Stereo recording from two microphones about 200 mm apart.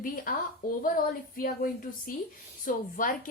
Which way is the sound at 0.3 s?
45° left (ahead or behind).